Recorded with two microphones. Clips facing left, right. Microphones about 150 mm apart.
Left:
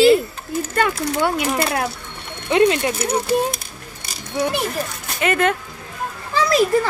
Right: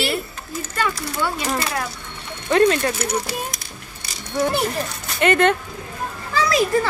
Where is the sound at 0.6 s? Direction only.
55° left (ahead or behind).